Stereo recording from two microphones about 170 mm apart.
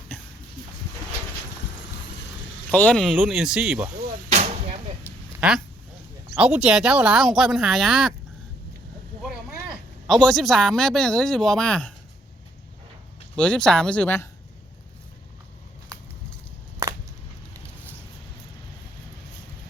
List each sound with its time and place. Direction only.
2.6 s speech: 10° left (ahead or behind)
4.3 s vehicle: 35° right (ahead or behind)
5.4 s a sound: 5° right (ahead or behind)
6.3 s speech: 5° right (ahead or behind)
10.1 s speech: centre (ahead or behind)
13.3 s speech: 5° left (ahead or behind)
16.8 s a sound: 15° right (ahead or behind)